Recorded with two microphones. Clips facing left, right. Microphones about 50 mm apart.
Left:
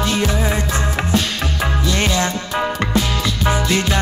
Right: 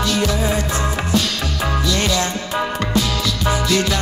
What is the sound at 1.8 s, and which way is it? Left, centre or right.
Music, left.